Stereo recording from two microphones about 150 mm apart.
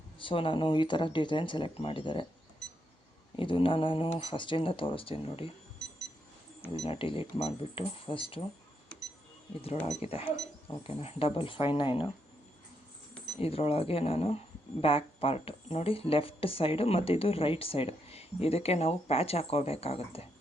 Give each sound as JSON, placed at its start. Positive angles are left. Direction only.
{"t": 0.2, "sound": "speech", "side_deg": 35}
{"t": 3.3, "sound": "speech", "side_deg": 35}
{"t": 6.7, "sound": "speech", "side_deg": 40}
{"t": 9.8, "sound": "speech", "side_deg": 40}
{"t": 13.4, "sound": "speech", "side_deg": 40}